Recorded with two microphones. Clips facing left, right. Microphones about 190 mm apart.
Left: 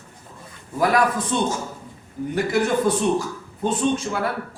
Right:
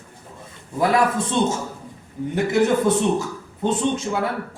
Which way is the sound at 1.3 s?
25° right (ahead or behind).